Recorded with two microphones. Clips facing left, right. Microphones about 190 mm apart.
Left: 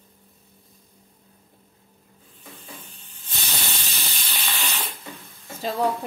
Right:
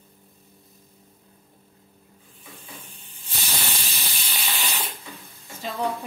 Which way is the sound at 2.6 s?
10° right (ahead or behind).